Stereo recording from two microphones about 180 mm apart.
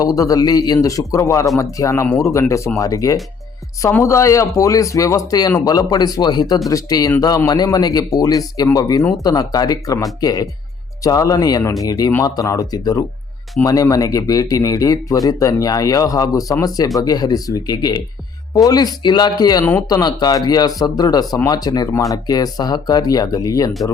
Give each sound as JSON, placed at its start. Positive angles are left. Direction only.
{"t": 0.0, "sound": "speech", "side_deg": 20}